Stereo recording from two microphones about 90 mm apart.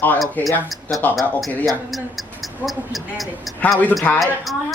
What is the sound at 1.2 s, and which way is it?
A woman's voice, centre (ahead or behind).